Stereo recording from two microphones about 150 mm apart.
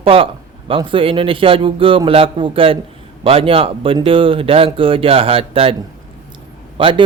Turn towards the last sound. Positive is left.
turn(degrees=-35)  # may be behind; listen again after turning